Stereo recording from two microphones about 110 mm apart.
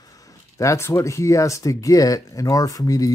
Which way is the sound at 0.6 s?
25° left (ahead or behind).